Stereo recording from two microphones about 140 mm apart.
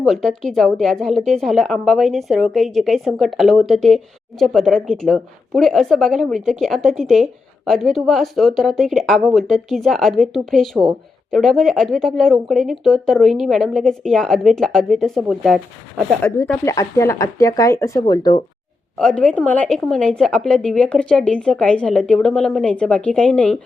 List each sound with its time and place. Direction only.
0.0 s a woman's voice: centre (ahead or behind)
16.2 s speech: 20° left (ahead or behind)
18.9 s a woman's voice: 5° left (ahead or behind)